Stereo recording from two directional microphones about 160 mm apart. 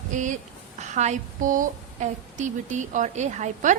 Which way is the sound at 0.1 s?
50° right (ahead or behind).